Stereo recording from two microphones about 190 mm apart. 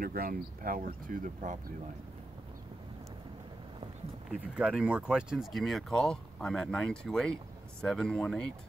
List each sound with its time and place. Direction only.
0.0 s speech: 50° right (ahead or behind)
4.3 s speech: 5° right (ahead or behind)